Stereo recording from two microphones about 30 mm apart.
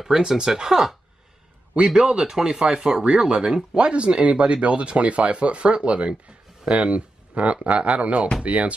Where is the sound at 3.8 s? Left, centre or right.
Right.